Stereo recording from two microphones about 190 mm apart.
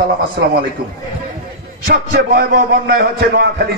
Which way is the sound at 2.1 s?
55° right (ahead or behind).